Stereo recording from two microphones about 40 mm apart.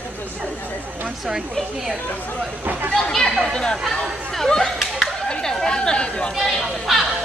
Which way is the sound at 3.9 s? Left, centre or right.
Centre.